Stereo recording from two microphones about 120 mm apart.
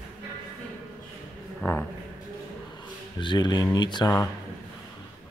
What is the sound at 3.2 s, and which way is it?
Speech, 40° left (ahead or behind).